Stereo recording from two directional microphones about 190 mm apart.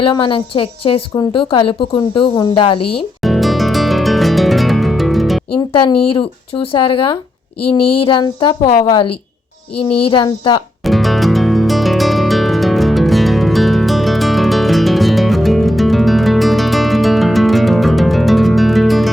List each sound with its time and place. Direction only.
0.0 s speech: 25° left (ahead or behind)
1.1 s speech: 20° left (ahead or behind)
3.2 s music: centre (ahead or behind)
5.5 s speech: 25° left (ahead or behind)
10.8 s music: centre (ahead or behind)